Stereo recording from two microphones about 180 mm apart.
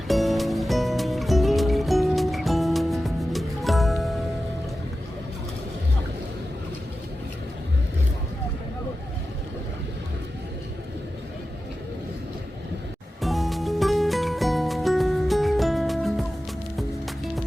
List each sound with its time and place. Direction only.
0.1 s music: centre (ahead or behind)
13.2 s music: centre (ahead or behind)